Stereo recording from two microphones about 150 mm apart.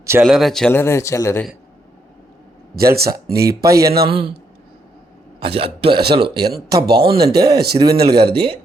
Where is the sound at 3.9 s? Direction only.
90° right.